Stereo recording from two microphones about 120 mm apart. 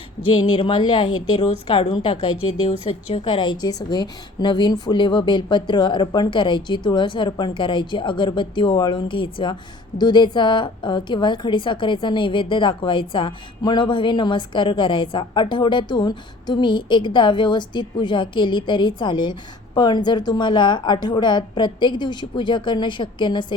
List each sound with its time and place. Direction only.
0.3 s a woman's voice: 40° left (ahead or behind)